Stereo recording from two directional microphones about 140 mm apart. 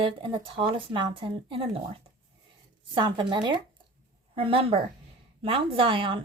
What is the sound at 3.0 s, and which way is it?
Speech, 35° right (ahead or behind).